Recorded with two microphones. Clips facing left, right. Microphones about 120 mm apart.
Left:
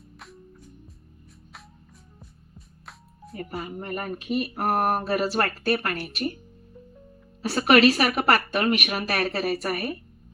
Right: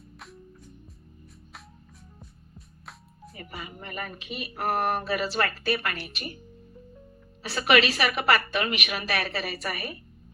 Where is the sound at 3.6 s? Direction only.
40° left (ahead or behind).